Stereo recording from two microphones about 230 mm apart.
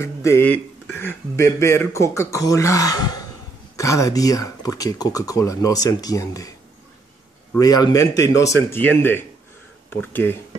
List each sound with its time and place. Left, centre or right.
0.0 s speech: centre
7.5 s speech: centre